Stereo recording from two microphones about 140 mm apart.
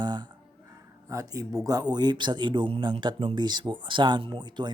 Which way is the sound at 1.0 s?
25° right (ahead or behind).